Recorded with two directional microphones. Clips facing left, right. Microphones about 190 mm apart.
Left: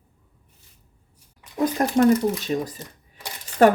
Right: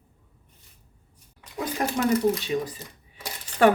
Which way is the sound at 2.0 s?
45° left (ahead or behind).